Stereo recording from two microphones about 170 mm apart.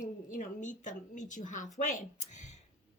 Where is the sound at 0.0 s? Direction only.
50° left (ahead or behind).